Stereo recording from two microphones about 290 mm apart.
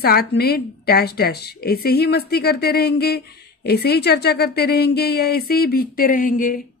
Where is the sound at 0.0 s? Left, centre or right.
Left.